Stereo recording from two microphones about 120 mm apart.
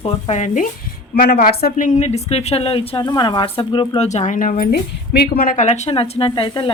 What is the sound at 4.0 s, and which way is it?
Speech, 75° left (ahead or behind).